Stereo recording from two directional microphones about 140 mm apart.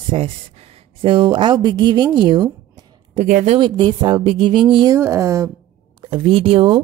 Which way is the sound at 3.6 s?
30° right (ahead or behind).